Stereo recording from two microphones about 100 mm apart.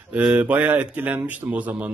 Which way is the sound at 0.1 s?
10° right (ahead or behind).